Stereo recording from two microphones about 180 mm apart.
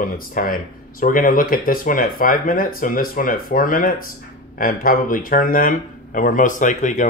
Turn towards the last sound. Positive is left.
turn(degrees=45)  # may be behind; listen again after turning